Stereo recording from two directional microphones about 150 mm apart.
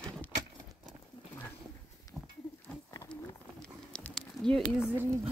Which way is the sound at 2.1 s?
15° right (ahead or behind).